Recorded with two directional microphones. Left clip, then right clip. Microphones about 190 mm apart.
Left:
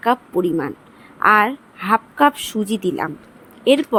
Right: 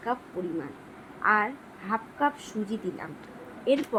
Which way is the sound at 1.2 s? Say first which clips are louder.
Left 11 dB; 45° left (ahead or behind).